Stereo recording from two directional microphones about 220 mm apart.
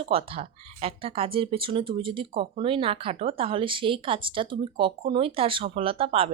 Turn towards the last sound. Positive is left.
turn(degrees=-25)  # may be behind; listen again after turning